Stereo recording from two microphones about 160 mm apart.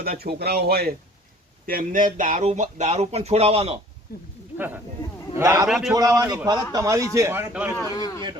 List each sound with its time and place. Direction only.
0.0 s speech: 75° right (ahead or behind)
1.6 s speech: 60° right (ahead or behind); by 3.8 s 40° right (ahead or behind)
4.1 s speech: 75° left (ahead or behind)
4.5 s a man's voice: 10° right (ahead or behind)
5.6 s a man's voice: centre (ahead or behind)
5.9 s a man's voice: 20° right (ahead or behind)
7.9 s a man's voice: 25° left (ahead or behind)